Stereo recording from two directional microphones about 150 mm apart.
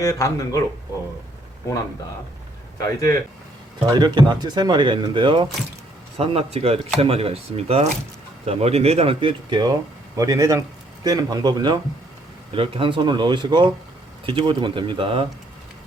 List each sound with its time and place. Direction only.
0.0 s speech: 20° left (ahead or behind)
2.7 s speech: 20° left (ahead or behind)
3.8 s speech: 30° right (ahead or behind)